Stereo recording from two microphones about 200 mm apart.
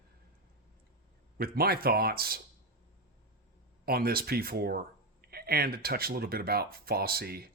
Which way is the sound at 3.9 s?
50° right (ahead or behind).